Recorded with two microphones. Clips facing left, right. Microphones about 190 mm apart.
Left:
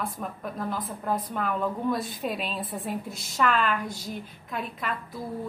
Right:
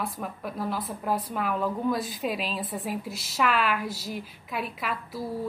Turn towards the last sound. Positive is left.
turn(degrees=-5)  # may be behind; listen again after turning